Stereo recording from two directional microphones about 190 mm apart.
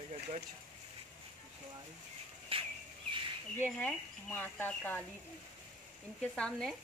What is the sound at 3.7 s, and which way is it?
Speech, 5° left (ahead or behind).